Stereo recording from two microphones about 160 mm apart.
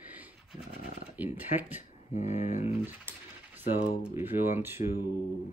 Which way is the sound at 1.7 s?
50° left (ahead or behind).